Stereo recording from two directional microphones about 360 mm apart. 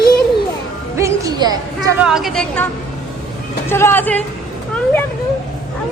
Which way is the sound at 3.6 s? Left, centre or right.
Centre.